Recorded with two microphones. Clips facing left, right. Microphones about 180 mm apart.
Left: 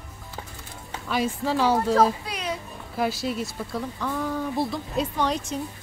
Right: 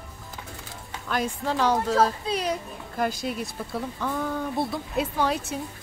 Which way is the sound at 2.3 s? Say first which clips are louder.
Right 7 dB; 25° right (ahead or behind).